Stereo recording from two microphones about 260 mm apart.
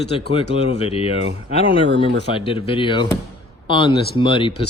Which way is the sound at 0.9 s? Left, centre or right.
Left.